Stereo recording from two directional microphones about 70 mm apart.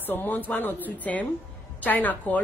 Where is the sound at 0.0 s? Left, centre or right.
Left.